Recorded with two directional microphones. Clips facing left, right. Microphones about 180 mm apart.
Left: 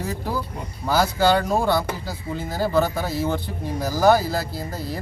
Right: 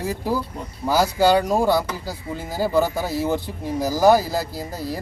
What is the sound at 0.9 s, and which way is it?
Speech, 10° right (ahead or behind).